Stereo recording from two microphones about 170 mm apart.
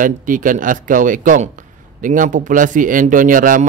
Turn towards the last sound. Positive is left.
turn(degrees=-50)  # may be behind; listen again after turning